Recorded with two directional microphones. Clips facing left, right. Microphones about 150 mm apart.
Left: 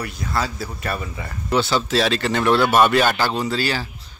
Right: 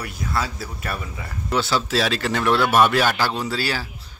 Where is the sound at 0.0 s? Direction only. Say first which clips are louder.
Left 2 dB; 5° right (ahead or behind).